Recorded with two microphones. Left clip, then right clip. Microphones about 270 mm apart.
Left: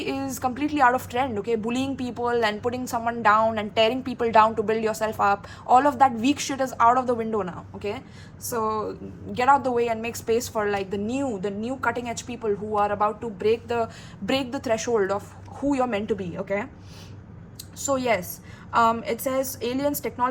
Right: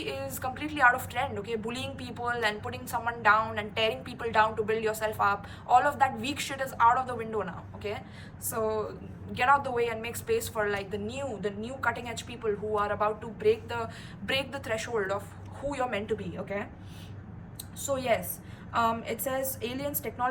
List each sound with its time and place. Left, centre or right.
0.0 s a woman's voice: left
18.7 s a woman's voice: left